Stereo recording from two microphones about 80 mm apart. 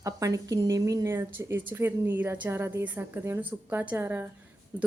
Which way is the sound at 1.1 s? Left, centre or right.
Right.